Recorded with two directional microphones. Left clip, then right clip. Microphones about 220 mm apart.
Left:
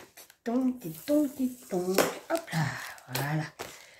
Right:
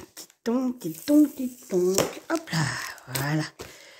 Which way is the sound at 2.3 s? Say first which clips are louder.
Right 3 dB; 50° right (ahead or behind).